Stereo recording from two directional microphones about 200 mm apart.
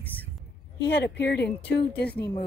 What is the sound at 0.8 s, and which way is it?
A woman's voice, 60° left (ahead or behind).